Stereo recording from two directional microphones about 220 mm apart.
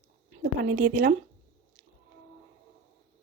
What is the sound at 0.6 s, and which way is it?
Speech, 45° right (ahead or behind).